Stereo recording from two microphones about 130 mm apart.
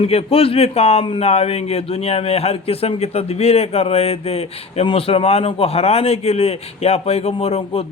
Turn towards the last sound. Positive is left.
turn(degrees=50)  # may be behind; listen again after turning